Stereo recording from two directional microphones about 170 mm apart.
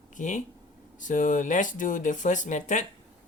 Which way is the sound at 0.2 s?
50° left (ahead or behind).